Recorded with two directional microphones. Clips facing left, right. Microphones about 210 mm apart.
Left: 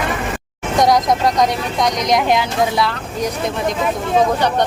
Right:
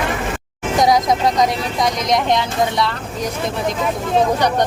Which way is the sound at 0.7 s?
Centre (ahead or behind).